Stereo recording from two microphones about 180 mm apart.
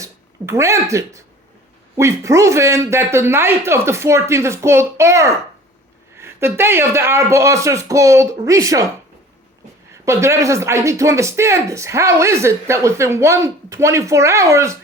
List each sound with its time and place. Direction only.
0.0 s speech: 15° right (ahead or behind)
9.9 s speech: 15° right (ahead or behind)